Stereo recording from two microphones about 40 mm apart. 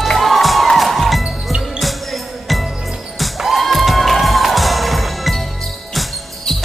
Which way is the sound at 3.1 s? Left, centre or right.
Centre.